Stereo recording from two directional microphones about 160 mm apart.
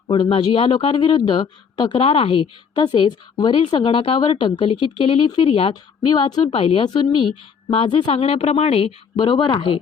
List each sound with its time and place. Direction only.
0.1 s speech: 30° left (ahead or behind)